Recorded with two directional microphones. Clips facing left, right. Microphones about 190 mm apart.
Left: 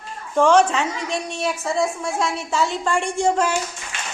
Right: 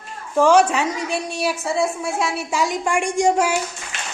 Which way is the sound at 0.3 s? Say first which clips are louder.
Right 1 dB; 5° right (ahead or behind).